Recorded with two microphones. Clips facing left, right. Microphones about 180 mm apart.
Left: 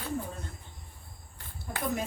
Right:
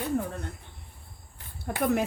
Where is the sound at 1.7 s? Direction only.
70° right (ahead or behind).